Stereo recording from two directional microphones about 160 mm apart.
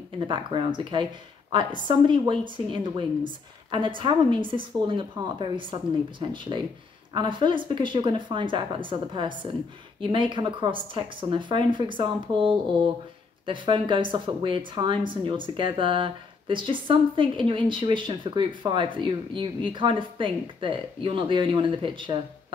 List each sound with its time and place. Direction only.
0.3 s speech: 30° right (ahead or behind)